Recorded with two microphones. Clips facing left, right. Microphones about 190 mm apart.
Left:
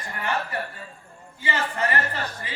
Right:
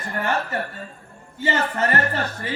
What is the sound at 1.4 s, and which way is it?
Speech, 45° right (ahead or behind).